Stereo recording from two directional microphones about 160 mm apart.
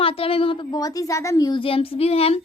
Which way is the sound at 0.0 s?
35° left (ahead or behind).